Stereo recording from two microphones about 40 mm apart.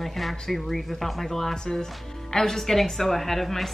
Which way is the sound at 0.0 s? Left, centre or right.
Centre.